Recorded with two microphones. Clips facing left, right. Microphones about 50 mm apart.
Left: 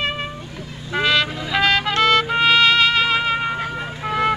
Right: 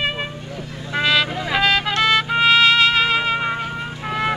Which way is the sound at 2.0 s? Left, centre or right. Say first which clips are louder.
Left 1 dB; centre.